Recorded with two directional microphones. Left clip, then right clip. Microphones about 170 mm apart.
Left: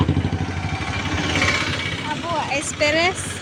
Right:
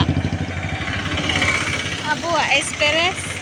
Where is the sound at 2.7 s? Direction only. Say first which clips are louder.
Left 4 dB; 25° left (ahead or behind).